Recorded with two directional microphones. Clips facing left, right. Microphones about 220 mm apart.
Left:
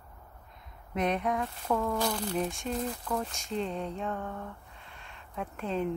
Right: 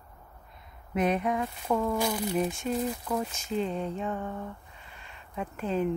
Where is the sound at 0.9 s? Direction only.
5° right (ahead or behind).